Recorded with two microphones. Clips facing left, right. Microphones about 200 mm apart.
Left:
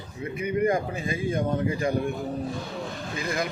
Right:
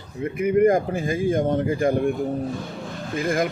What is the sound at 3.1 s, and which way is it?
Speech, 50° right (ahead or behind).